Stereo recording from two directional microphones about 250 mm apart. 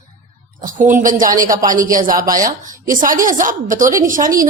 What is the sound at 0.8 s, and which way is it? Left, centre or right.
A woman's voice, right.